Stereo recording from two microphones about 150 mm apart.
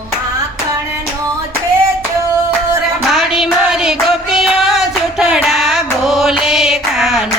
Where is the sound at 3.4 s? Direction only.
5° right (ahead or behind).